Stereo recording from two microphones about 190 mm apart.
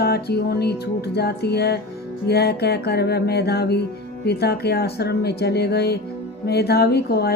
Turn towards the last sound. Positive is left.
turn(degrees=55)  # may be behind; listen again after turning